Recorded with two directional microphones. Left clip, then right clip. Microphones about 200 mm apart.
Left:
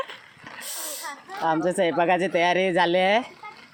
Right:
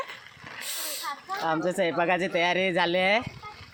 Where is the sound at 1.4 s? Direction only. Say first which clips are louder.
Left 4 dB; 10° left (ahead or behind).